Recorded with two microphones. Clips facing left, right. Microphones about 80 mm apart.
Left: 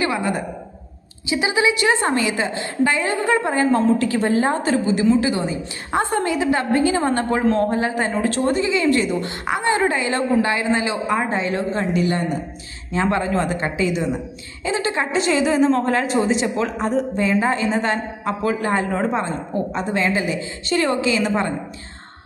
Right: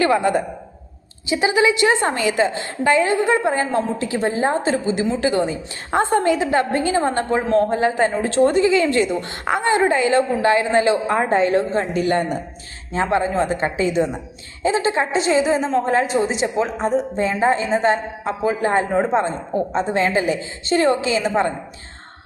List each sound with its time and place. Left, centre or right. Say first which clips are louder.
1.3 s a woman's voice: right 2 dB; right
12.9 s a woman's voice: right 1 dB; right